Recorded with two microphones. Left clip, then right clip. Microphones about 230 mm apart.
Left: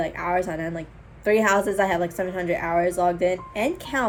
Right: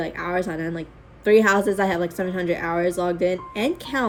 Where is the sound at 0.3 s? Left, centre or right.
Centre.